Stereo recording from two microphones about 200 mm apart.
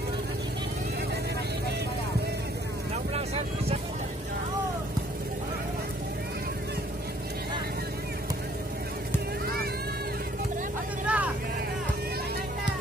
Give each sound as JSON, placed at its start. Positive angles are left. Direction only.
{"t": 11.1, "sound": "vehicle", "side_deg": -5}